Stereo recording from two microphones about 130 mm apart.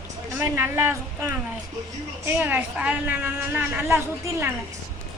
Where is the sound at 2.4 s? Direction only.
10° right (ahead or behind).